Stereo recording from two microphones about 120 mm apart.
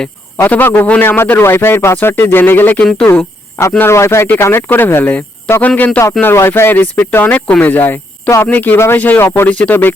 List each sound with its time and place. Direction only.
0.3 s a man's voice: 15° left (ahead or behind)